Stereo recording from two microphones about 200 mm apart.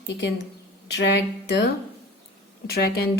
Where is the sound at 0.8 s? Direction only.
60° left (ahead or behind).